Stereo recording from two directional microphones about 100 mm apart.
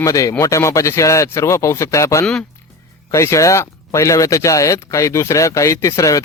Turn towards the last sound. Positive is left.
turn(degrees=35)  # may be behind; listen again after turning